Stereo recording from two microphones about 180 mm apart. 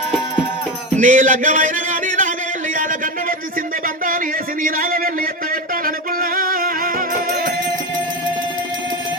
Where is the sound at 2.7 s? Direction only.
45° right (ahead or behind).